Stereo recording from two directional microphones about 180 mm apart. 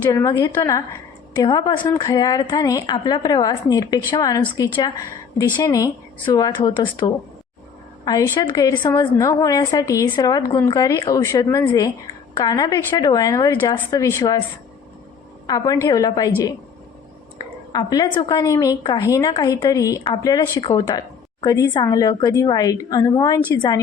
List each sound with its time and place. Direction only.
0.1 s a woman's voice: 20° left (ahead or behind)
15.4 s a woman's voice: 20° left (ahead or behind)
17.7 s a woman's voice: 20° left (ahead or behind)